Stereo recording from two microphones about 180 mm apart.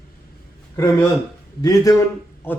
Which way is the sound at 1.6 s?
20° left (ahead or behind).